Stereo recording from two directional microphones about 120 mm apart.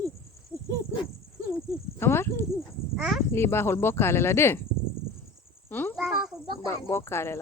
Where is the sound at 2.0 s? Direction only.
20° left (ahead or behind).